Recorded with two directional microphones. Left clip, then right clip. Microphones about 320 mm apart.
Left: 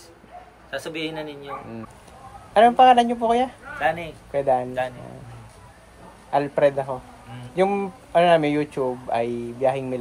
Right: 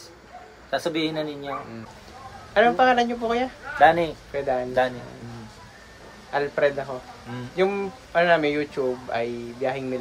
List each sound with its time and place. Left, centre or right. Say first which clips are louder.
0.7 s a man's voice: right 4 dB; centre
2.5 s speech: left 4 dB; left
3.8 s a man's voice: right 7 dB; centre
4.3 s speech: left 4 dB; left
6.3 s speech: left 3 dB; left